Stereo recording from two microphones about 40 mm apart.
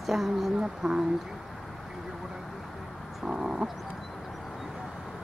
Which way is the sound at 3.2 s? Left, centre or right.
Centre.